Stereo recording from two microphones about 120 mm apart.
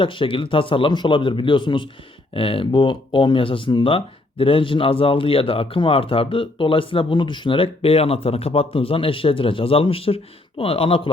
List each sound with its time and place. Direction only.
0.0 s speech: 45° left (ahead or behind)